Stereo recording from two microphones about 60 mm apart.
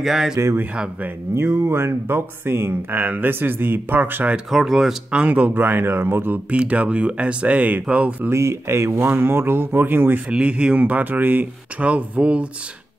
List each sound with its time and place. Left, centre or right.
0.0 s speech: centre
1.3 s speech: right
2.9 s speech: right
4.5 s speech: centre
5.1 s speech: right
5.5 s speech: right
6.5 s speech: right
8.3 s speech: right
10.3 s speech: centre
11.9 s speech: centre